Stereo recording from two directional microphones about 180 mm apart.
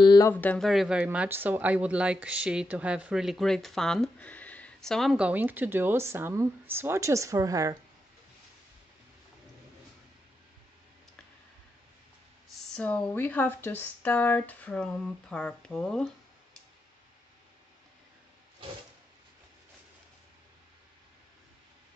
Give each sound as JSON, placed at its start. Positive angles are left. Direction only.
{"t": 0.0, "sound": "speech", "side_deg": 20}
{"t": 0.3, "sound": "speech", "side_deg": 10}
{"t": 12.7, "sound": "speech", "side_deg": 5}